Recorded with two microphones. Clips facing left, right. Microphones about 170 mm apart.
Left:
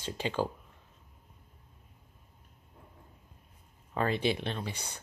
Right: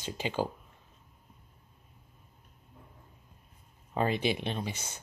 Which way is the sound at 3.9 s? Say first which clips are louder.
Even; 20° right (ahead or behind).